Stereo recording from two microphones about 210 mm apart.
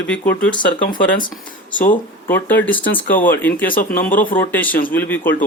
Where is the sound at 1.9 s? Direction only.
10° left (ahead or behind).